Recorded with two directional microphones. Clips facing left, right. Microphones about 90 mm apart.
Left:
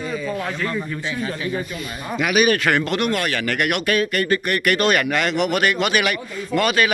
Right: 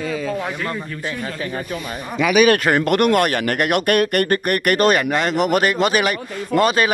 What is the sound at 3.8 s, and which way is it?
A man's voice, 60° right (ahead or behind).